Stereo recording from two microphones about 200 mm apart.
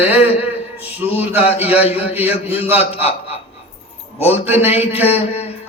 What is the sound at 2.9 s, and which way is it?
Speech, 30° left (ahead or behind).